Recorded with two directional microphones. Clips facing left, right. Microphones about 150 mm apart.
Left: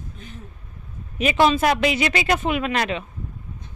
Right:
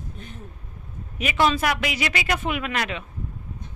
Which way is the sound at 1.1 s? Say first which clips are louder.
Left 4 dB; 25° left (ahead or behind).